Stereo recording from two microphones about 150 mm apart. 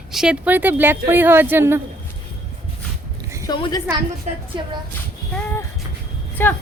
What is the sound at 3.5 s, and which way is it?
Speech, 30° left (ahead or behind).